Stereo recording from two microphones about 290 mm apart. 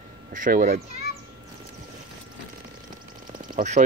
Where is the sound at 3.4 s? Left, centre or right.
Right.